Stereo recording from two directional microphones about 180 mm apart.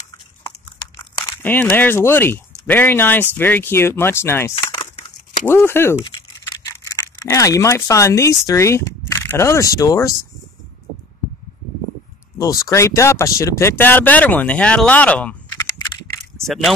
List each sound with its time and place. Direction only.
1.2 s speech: 10° left (ahead or behind)
12.4 s speech: 20° left (ahead or behind)
16.4 s speech: centre (ahead or behind)